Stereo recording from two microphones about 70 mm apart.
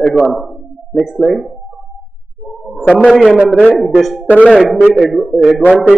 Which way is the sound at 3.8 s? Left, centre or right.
Centre.